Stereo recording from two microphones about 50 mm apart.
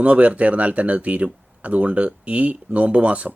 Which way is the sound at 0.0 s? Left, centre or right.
Right.